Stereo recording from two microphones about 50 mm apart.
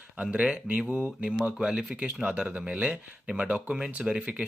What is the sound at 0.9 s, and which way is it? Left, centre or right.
Speech, centre.